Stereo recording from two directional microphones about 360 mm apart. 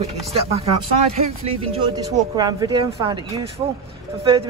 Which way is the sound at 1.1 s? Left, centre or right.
Centre.